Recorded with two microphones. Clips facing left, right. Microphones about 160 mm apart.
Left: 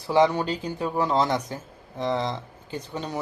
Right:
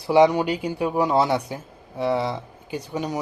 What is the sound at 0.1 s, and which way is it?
Speech, 10° right (ahead or behind).